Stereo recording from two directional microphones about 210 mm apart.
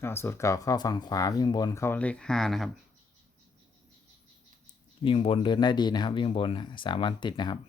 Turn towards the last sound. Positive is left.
turn(degrees=20)  # may be behind; listen again after turning